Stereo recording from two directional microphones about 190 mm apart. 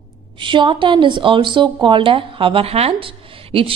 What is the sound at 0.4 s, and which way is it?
Speech, 25° right (ahead or behind).